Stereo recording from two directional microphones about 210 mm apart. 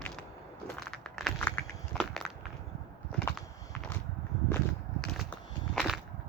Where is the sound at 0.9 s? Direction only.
Centre (ahead or behind).